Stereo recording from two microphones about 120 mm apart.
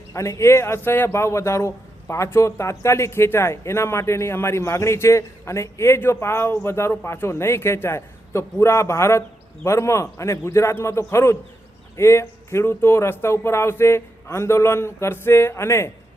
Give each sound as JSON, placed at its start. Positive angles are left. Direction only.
{"t": 0.1, "sound": "a man's voice", "side_deg": 25}